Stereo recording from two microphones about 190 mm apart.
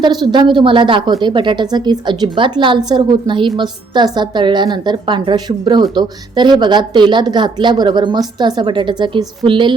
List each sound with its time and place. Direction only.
0.0 s a woman's voice: 20° right (ahead or behind)